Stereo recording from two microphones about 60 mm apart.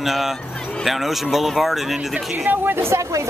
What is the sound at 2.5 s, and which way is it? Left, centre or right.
Speech, right.